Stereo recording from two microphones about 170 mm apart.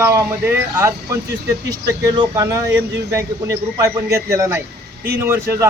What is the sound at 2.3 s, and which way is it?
Speech, 20° right (ahead or behind).